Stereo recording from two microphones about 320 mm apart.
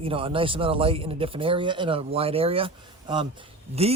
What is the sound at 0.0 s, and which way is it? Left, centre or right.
Speech, centre.